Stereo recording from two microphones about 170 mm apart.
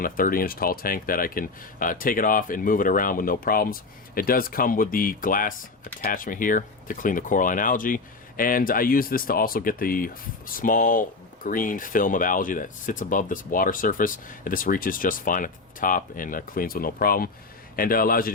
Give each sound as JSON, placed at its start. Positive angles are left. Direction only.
{"t": 0.0, "sound": "speech", "side_deg": 55}